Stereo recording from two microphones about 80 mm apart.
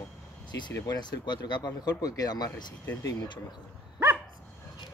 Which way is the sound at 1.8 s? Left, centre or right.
Left.